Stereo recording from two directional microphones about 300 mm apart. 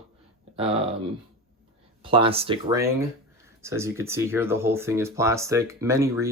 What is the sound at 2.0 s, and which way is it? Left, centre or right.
Speech, centre.